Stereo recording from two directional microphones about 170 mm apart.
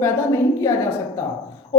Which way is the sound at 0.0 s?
15° left (ahead or behind).